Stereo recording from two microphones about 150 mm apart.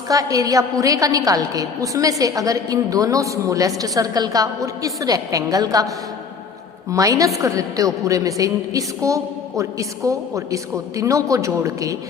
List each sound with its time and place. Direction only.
0.1 s a woman's voice: 25° right (ahead or behind)
6.9 s a woman's voice: 20° right (ahead or behind)